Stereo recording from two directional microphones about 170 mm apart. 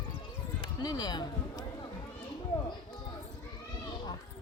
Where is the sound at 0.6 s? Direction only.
25° left (ahead or behind).